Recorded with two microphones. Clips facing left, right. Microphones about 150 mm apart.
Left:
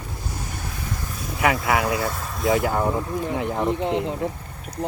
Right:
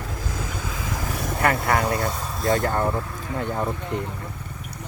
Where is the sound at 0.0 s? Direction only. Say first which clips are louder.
Right 3 dB; 90° right.